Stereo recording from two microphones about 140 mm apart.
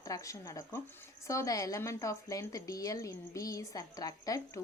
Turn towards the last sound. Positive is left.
turn(degrees=25)  # may be behind; listen again after turning